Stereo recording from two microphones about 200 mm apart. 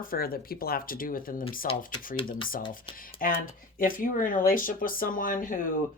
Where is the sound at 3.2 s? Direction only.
45° left (ahead or behind).